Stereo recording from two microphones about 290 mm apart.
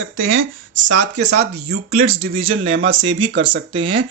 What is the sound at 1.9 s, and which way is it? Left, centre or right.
Speech, right.